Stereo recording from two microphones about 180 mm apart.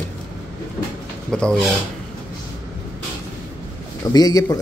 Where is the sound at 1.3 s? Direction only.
5° left (ahead or behind).